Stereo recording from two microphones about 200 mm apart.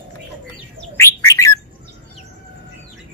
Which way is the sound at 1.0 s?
15° left (ahead or behind).